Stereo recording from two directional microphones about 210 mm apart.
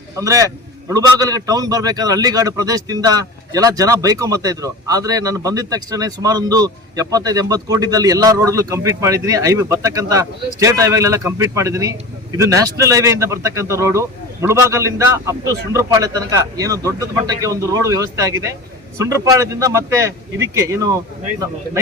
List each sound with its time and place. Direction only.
0.2 s a man's voice: 15° right (ahead or behind)